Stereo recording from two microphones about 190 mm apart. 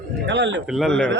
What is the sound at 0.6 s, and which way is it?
Speech, centre (ahead or behind).